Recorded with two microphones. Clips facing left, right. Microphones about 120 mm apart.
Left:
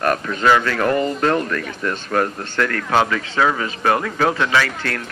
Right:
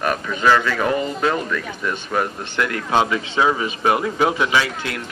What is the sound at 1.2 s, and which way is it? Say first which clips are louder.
Speech: left 2 dB; 5° right (ahead or behind).